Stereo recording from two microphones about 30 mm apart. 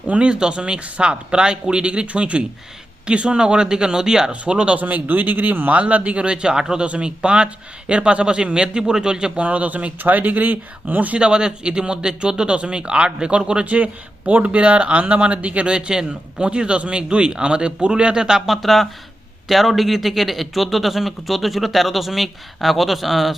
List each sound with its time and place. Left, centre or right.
0.2 s speech: right
4.3 s speech: right
4.8 s speech: right
5.7 s speech: right
6.2 s speech: right
6.8 s speech: right
9.4 s speech: right
11.2 s speech: right
13.7 s speech: right
15.6 s speech: right
18.3 s speech: centre